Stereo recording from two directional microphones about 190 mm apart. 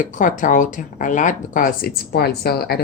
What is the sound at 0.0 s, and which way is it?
Speech, 40° left (ahead or behind).